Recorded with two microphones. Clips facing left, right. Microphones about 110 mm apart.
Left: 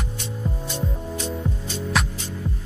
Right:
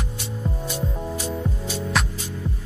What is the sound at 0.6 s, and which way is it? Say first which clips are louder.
Music: right 1 dB; 10° right (ahead or behind).